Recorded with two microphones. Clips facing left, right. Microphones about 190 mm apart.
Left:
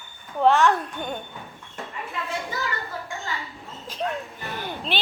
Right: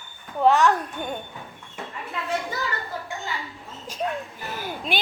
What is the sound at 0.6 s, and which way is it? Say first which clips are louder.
Speech: even; centre (ahead or behind).